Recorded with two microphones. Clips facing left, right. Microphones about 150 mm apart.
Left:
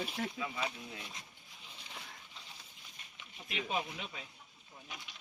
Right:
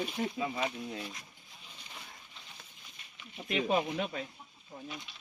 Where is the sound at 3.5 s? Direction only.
50° right (ahead or behind).